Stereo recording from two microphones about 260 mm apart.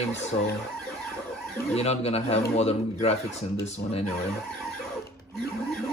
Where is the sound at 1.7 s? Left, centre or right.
Left.